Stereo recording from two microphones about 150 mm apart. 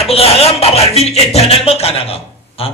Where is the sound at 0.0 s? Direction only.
40° left (ahead or behind).